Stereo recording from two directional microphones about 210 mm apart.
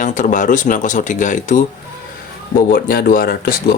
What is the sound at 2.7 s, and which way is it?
Speech, 45° left (ahead or behind).